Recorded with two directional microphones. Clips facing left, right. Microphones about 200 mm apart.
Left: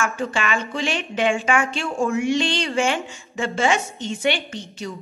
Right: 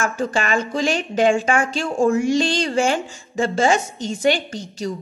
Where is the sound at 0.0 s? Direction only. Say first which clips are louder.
Right 2 dB; 40° right (ahead or behind).